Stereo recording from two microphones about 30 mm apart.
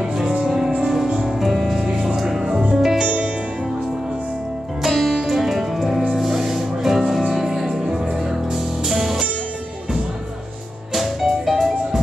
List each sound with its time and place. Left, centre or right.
0.0 s music: right
4.8 s music: centre
10.9 s music: centre